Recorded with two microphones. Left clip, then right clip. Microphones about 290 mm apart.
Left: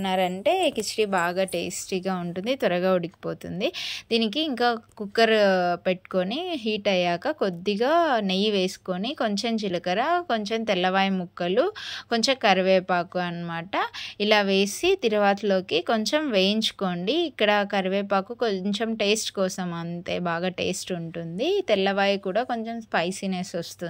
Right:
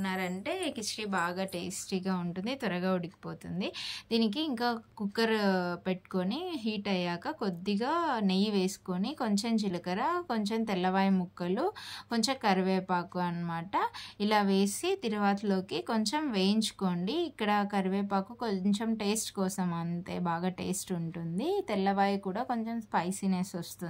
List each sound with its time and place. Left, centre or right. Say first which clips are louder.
0.0 s a woman's voice: left 12 dB; centre